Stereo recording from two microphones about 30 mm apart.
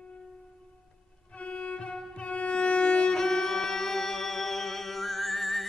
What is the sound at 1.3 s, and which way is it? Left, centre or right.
Violin, left.